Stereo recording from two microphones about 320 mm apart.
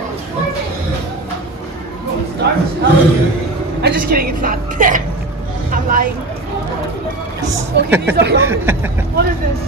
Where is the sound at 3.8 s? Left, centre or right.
Right.